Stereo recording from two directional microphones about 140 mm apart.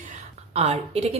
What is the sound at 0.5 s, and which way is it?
Speech, 50° right (ahead or behind).